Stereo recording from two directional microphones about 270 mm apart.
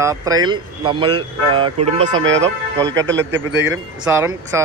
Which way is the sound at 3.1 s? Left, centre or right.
Right.